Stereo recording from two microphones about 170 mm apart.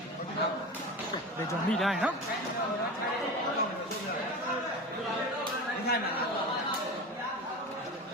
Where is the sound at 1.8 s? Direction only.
5° right (ahead or behind).